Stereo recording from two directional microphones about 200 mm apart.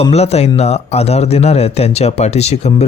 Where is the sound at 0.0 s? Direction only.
30° left (ahead or behind).